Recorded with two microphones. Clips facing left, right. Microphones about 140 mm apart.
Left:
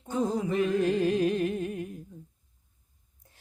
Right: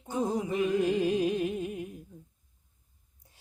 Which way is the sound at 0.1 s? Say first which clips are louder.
Left 2 dB; 15° right (ahead or behind).